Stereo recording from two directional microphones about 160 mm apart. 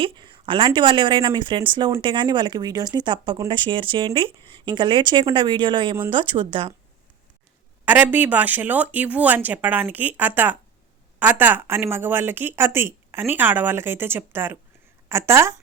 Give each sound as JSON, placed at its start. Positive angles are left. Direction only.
{"t": 0.0, "sound": "speech", "side_deg": -30}
{"t": 7.9, "sound": "speech", "side_deg": -10}